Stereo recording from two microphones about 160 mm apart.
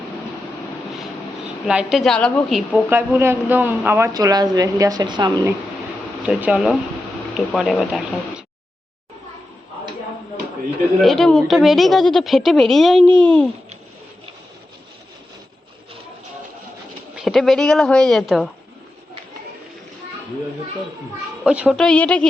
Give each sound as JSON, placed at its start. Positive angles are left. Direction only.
{"t": 1.6, "sound": "a woman's voice", "side_deg": -5}
{"t": 2.9, "sound": "a woman's voice", "side_deg": -15}
{"t": 6.2, "sound": "a woman's voice", "side_deg": -5}
{"t": 11.0, "sound": "a woman's voice", "side_deg": 0}
{"t": 17.2, "sound": "a woman's voice", "side_deg": 0}
{"t": 21.4, "sound": "speech", "side_deg": -5}
{"t": 21.8, "sound": "speech", "side_deg": 5}